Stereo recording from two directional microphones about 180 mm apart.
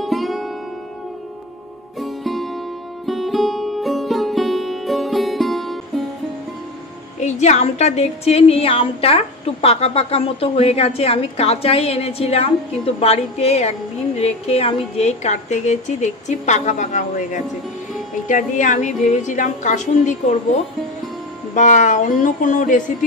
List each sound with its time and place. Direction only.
0.0 s music: centre (ahead or behind)
2.0 s music: centre (ahead or behind)
7.2 s a woman's voice: 40° left (ahead or behind)
21.5 s a woman's voice: 45° left (ahead or behind)